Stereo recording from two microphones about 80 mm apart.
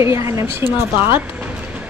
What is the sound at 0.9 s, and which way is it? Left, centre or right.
Speech, right.